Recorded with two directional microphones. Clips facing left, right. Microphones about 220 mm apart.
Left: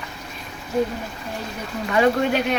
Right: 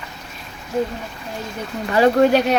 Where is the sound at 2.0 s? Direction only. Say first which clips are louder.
Right 5 dB; 35° right (ahead or behind).